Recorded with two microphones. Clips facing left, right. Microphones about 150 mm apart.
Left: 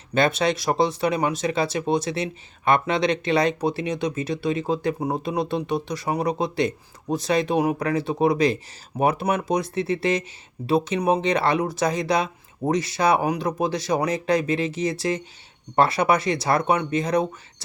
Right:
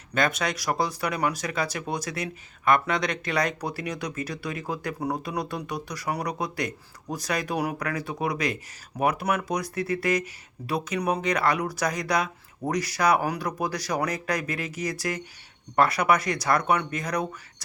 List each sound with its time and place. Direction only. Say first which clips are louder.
0.1 s speech: left 5 dB; 25° left (ahead or behind)